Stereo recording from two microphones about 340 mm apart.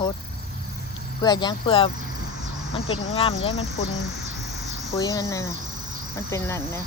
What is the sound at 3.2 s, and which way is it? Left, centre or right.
Speech, centre.